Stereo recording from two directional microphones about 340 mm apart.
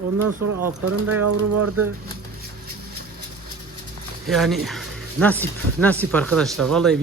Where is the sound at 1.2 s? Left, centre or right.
Right.